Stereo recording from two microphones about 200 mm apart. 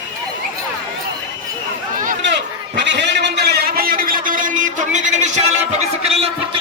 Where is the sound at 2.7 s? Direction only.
60° right (ahead or behind).